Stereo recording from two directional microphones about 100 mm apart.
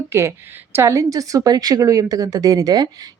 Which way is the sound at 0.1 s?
25° right (ahead or behind).